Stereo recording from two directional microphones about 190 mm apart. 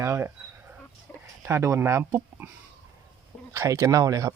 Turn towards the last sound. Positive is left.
turn(degrees=-20)  # may be behind; listen again after turning